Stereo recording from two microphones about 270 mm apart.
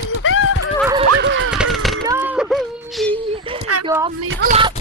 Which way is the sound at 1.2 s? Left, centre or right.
Right.